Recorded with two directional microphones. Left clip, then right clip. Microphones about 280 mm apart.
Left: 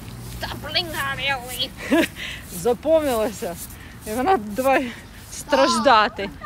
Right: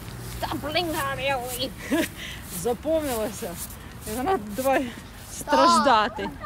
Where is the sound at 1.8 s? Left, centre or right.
Centre.